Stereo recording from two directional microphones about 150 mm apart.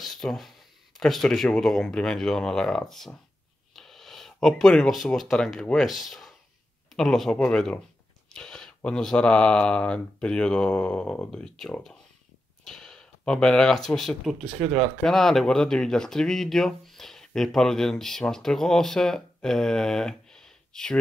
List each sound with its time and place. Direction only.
0.0 s speech: centre (ahead or behind)